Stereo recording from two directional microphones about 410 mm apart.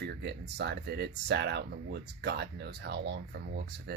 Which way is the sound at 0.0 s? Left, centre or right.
Right.